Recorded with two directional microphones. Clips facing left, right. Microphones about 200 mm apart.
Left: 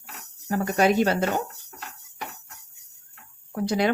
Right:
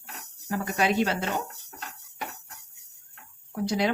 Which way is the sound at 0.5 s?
45° left (ahead or behind).